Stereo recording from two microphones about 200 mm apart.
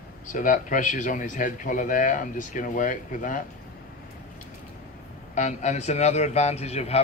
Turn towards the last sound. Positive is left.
turn(degrees=30)  # may be behind; listen again after turning